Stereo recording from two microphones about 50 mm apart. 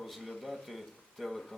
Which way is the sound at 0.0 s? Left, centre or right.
Centre.